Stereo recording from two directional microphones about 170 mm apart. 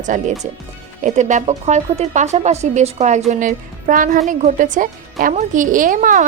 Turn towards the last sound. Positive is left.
turn(degrees=-50)  # may be behind; listen again after turning